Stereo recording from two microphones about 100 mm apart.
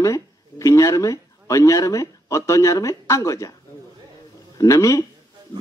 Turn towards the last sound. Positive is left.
turn(degrees=35)  # may be behind; listen again after turning